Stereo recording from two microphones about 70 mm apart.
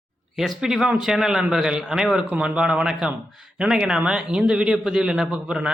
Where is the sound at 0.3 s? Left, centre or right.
Centre.